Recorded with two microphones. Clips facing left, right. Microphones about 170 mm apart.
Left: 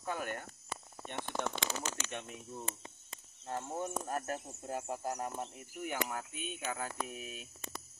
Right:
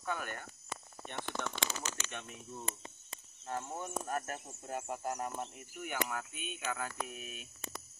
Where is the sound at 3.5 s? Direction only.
30° left (ahead or behind).